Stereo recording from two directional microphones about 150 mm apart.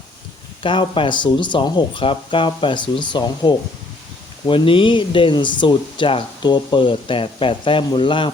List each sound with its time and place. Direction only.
0.6 s speech: 35° left (ahead or behind)